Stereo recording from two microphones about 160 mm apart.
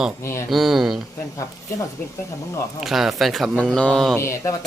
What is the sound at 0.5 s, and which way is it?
Speech, centre (ahead or behind).